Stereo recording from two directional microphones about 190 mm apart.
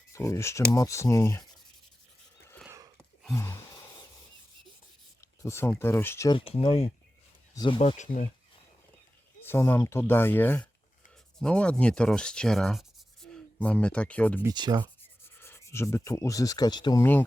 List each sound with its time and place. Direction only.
0.1 s speech: 15° left (ahead or behind)
2.6 s a sound: 15° right (ahead or behind)
3.3 s gasp: 15° left (ahead or behind)
5.4 s speech: 15° left (ahead or behind)
6.3 s speech: 30° left (ahead or behind)
7.8 s speech: 35° left (ahead or behind)
9.4 s speech: 10° left (ahead or behind)
14.4 s speech: 20° right (ahead or behind)
15.4 s speech: 15° left (ahead or behind)